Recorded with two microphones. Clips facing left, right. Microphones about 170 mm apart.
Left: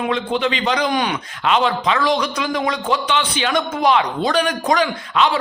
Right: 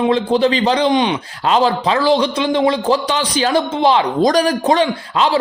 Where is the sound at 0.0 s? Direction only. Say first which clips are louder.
Right 6 dB; 30° right (ahead or behind).